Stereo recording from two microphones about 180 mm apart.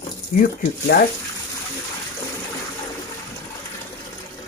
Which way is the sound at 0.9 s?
65° left (ahead or behind).